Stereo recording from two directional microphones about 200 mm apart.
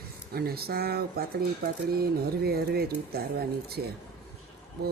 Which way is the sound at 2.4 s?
50° right (ahead or behind).